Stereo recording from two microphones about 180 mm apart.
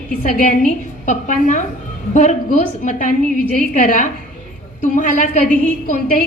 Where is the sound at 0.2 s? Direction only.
45° left (ahead or behind).